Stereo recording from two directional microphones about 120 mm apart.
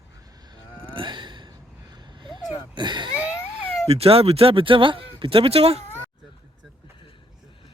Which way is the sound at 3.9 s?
55° right (ahead or behind).